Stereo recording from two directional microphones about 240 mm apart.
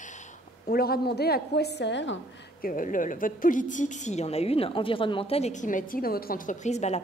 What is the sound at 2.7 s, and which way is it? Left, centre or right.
A woman's voice, left.